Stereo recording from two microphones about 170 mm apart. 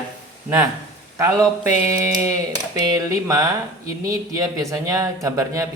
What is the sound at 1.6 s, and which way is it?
Speech, 15° right (ahead or behind).